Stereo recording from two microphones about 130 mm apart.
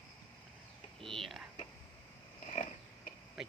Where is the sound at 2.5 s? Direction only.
65° left (ahead or behind).